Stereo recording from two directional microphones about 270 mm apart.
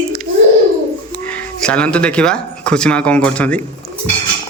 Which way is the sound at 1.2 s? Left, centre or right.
Centre.